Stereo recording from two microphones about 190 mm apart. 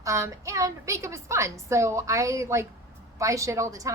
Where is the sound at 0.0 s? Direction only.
15° right (ahead or behind).